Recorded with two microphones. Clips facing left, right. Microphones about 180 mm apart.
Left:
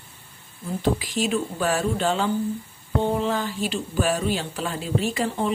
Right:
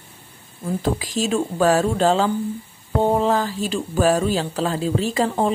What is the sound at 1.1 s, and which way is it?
Speech, 40° right (ahead or behind).